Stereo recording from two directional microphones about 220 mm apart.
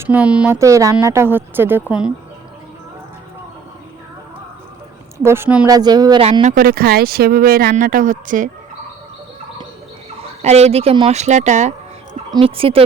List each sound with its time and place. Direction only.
0.0 s speech: 5° right (ahead or behind)
5.1 s speech: 10° right (ahead or behind); by 8.4 s 35° right (ahead or behind)
10.4 s speech: 30° right (ahead or behind)